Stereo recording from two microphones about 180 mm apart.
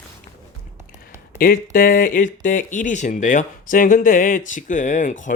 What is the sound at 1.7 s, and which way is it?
Speech, 50° left (ahead or behind).